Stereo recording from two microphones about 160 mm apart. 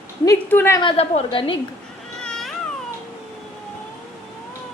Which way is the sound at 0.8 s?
35° left (ahead or behind).